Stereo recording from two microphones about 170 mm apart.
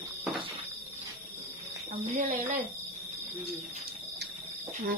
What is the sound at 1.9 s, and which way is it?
Speech, 45° right (ahead or behind).